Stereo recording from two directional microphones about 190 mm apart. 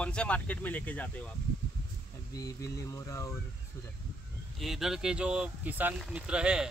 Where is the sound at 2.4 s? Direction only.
15° left (ahead or behind).